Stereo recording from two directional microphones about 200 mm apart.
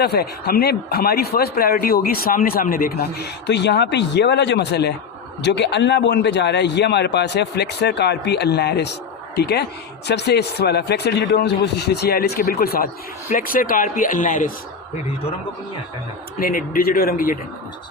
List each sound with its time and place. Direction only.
0.0 s a man's voice: 55° left (ahead or behind)
16.4 s speech: 45° left (ahead or behind)